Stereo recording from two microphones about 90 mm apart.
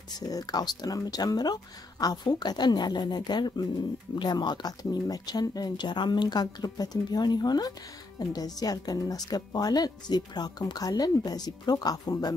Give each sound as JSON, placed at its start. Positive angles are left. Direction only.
{"t": 0.2, "sound": "speech", "side_deg": 45}